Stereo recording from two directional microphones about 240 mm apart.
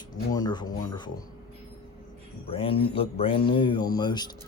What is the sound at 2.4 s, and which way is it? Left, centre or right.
Speech, left.